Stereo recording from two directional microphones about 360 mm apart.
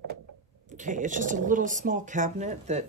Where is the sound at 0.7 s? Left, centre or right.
Right.